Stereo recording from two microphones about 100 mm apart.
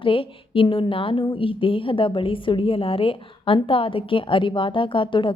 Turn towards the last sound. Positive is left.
turn(degrees=55)  # may be behind; listen again after turning